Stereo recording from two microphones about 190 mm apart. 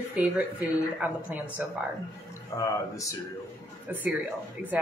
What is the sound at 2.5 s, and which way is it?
Speech, 15° left (ahead or behind).